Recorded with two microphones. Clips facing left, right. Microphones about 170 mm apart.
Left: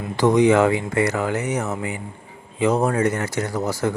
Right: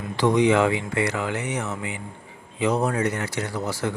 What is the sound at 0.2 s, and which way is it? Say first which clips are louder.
Speech: left 3 dB; 45° left (ahead or behind).